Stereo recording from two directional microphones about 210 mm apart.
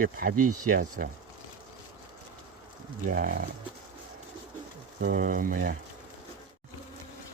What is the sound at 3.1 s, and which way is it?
Speech, 40° right (ahead or behind).